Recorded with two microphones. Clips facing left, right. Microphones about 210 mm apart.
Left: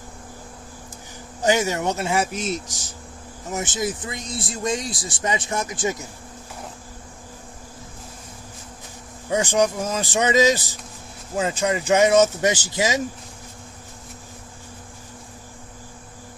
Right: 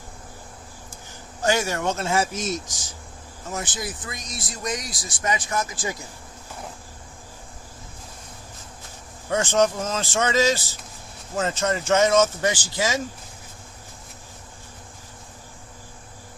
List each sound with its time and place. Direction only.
1.4 s speech: 20° left (ahead or behind)
3.5 s speech: 20° left (ahead or behind)
9.3 s speech: 15° left (ahead or behind)